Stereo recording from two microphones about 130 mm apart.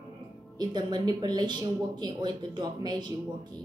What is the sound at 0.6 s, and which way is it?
Speech, 35° right (ahead or behind).